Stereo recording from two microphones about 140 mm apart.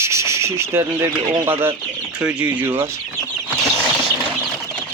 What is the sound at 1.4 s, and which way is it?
Speech, 15° right (ahead or behind).